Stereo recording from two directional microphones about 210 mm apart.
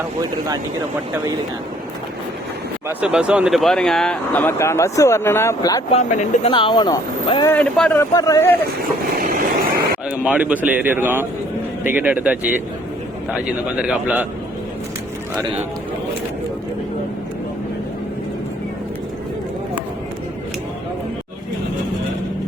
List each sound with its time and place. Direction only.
3.0 s speech: 5° right (ahead or behind); by 5.8 s 15° left (ahead or behind)
5.9 s speech: 35° left (ahead or behind)
7.5 s a man's voice: 5° left (ahead or behind)
8.1 s speech: 15° left (ahead or behind)
9.1 s vehicle: 45° right (ahead or behind)
10.1 s speech: 5° right (ahead or behind)
13.7 s a man's voice: 5° right (ahead or behind)